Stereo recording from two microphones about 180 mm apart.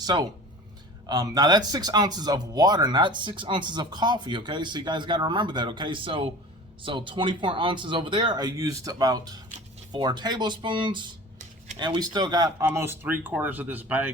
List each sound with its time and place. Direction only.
0.0 s speech: 20° right (ahead or behind)